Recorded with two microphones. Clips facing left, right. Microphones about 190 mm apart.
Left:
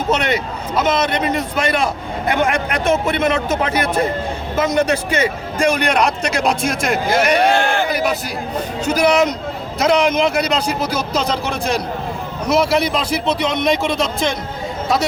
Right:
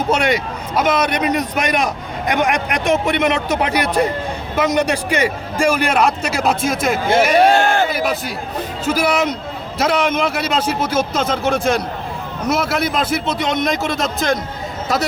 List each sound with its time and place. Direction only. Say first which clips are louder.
0.1 s a man's voice: even; 10° right (ahead or behind)
7.3 s speech: right 3 dB; 40° right (ahead or behind)
8.8 s a man's voice: left 3 dB; 5° right (ahead or behind)